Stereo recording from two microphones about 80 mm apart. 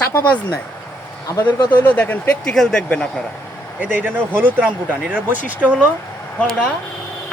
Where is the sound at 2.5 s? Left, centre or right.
Centre.